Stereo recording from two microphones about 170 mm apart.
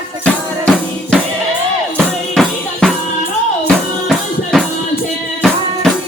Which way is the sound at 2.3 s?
Centre (ahead or behind).